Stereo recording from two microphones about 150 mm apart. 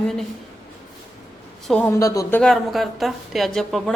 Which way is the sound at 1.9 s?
20° left (ahead or behind).